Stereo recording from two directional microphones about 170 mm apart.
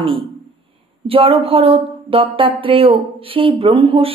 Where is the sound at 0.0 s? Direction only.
30° right (ahead or behind).